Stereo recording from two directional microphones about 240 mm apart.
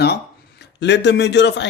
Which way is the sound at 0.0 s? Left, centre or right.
Left.